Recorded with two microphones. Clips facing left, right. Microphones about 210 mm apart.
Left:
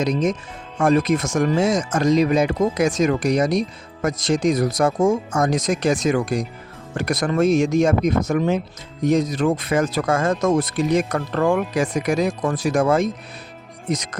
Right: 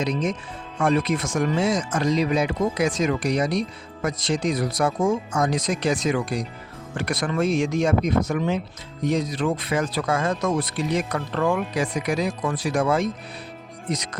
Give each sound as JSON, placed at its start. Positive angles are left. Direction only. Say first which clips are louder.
{"t": 0.0, "sound": "speech", "louder": "left 4 dB", "side_deg": 45}